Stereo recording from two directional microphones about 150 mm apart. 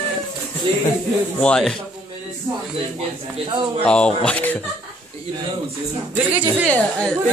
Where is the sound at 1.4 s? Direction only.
5° left (ahead or behind).